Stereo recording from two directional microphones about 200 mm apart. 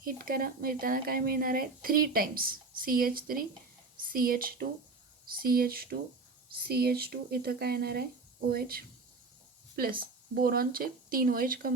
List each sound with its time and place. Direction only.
0.0 s speech: 45° right (ahead or behind)